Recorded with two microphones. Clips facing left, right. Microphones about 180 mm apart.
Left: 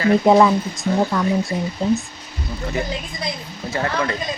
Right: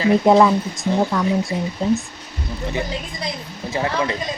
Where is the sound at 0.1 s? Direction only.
Centre (ahead or behind).